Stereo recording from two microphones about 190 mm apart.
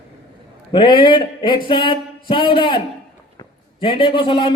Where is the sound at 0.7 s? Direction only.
25° left (ahead or behind).